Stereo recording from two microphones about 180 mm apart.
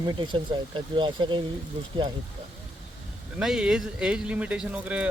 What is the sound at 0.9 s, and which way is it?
Speech, 25° right (ahead or behind).